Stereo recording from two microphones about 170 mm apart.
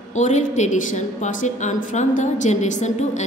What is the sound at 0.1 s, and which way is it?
A woman's voice, 45° left (ahead or behind).